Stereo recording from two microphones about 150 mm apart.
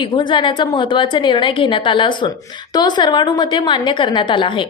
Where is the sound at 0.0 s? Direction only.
30° left (ahead or behind).